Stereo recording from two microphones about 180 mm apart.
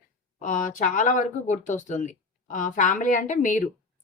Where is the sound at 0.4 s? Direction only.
45° left (ahead or behind).